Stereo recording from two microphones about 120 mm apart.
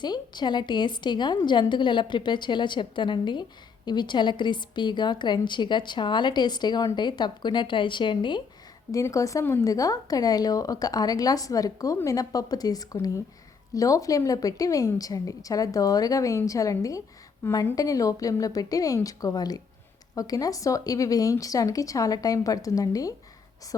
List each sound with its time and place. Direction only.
0.0 s a woman's voice: 40° left (ahead or behind)
8.9 s a woman's voice: 25° left (ahead or behind)